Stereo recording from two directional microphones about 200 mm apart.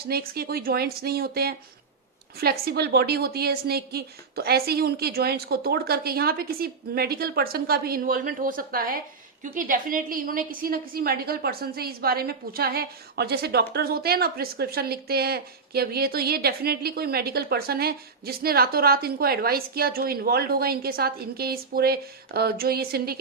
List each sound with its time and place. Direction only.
0.1 s a woman's voice: 50° right (ahead or behind)